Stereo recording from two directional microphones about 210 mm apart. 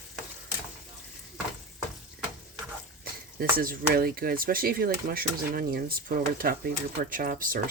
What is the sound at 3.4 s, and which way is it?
Speech, 45° right (ahead or behind).